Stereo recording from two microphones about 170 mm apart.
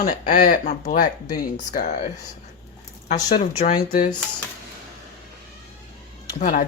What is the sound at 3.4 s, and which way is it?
Speech, 40° left (ahead or behind).